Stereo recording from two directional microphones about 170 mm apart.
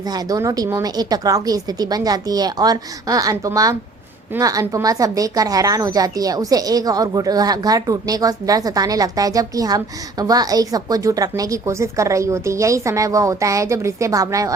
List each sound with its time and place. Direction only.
0.1 s speech: 20° right (ahead or behind)